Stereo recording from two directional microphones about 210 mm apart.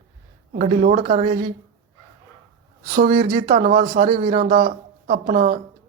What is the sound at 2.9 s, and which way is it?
Speech, 40° right (ahead or behind).